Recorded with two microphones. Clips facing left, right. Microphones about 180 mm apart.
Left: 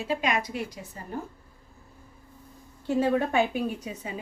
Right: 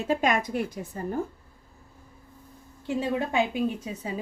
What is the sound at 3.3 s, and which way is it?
Speech, 20° right (ahead or behind).